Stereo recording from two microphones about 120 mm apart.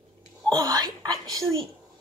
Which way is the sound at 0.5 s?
35° right (ahead or behind).